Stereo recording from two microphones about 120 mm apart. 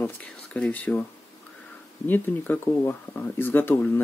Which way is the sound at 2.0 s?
15° left (ahead or behind).